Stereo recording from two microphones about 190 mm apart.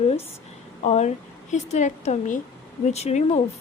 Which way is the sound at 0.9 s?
35° left (ahead or behind).